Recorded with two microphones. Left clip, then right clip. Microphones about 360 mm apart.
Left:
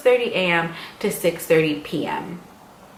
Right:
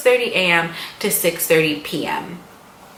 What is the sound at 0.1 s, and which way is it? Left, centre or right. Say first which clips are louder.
Speech: right 3 dB; centre.